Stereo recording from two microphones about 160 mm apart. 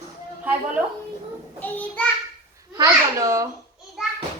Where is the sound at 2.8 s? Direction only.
20° right (ahead or behind).